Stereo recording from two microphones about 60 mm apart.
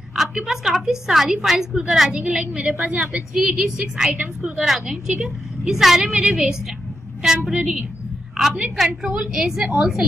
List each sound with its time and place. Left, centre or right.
0.1 s a woman's voice: centre